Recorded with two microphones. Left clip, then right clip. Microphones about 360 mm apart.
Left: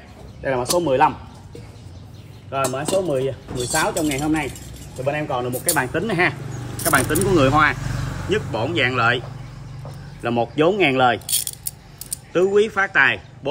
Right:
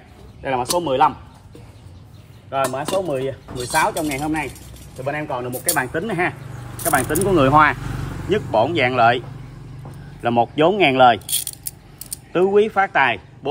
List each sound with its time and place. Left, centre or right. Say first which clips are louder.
0.4 s speech: even; centre
2.5 s speech: even; centre
10.2 s speech: right 2 dB; centre
11.2 s coin: left 1 dB; centre
12.3 s speech: right 1 dB; centre